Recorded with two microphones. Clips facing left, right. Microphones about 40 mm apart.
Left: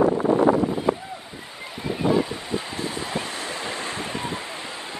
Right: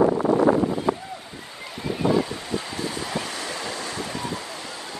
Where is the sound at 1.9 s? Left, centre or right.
Centre.